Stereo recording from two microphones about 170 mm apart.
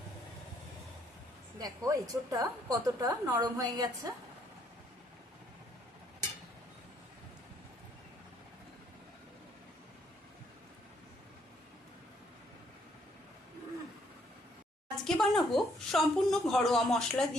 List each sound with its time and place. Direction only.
1.5 s a woman's voice: 20° right (ahead or behind)
15.0 s a woman's voice: centre (ahead or behind)